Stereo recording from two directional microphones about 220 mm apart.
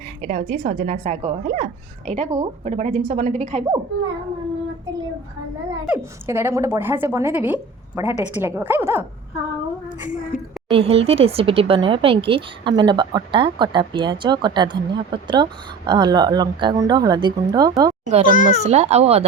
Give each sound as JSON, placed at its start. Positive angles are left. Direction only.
{"t": 0.2, "sound": "a woman's voice", "side_deg": -30}
{"t": 5.9, "sound": "a woman's voice", "side_deg": -10}
{"t": 10.7, "sound": "speech", "side_deg": -25}
{"t": 18.3, "sound": "a child's voice", "side_deg": 35}
{"t": 18.6, "sound": "speech", "side_deg": -30}